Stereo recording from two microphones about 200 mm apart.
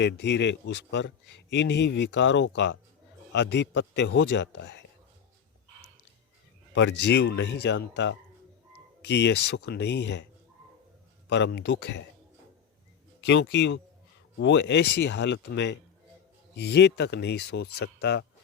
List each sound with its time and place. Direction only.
0.0 s a man's voice: 60° left (ahead or behind)
6.7 s a man's voice: 60° left (ahead or behind)
11.3 s a man's voice: 60° left (ahead or behind)
13.2 s a man's voice: 60° left (ahead or behind)